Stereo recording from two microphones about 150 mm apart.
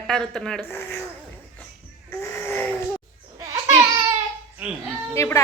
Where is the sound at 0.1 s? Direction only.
5° left (ahead or behind).